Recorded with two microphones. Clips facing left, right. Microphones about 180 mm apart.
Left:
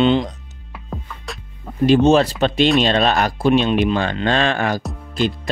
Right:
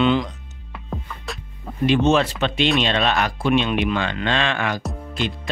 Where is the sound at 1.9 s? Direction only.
35° left (ahead or behind).